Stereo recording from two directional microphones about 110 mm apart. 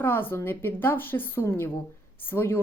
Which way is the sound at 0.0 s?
20° left (ahead or behind).